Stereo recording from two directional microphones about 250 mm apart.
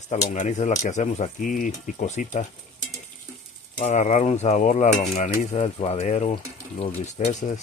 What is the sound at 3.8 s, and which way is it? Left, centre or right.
Speech, left.